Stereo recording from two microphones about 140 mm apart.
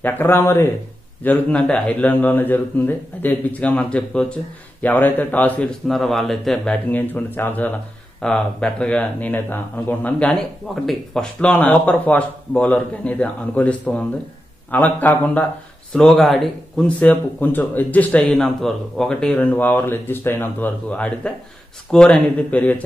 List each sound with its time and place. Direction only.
0.0 s speech: 15° left (ahead or behind)